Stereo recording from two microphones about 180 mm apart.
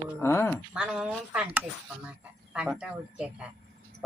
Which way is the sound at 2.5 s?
5° right (ahead or behind).